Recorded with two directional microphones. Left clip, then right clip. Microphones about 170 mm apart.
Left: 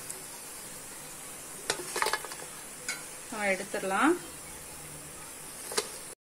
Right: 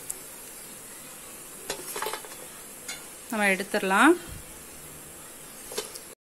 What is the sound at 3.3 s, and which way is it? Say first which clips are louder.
Speech: right 6 dB; 55° right (ahead or behind).